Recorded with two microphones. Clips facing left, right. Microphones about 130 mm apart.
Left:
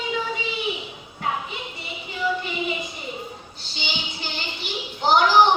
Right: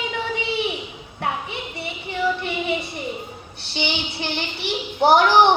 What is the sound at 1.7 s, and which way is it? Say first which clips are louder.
Music: right 8 dB; 70° right (ahead or behind).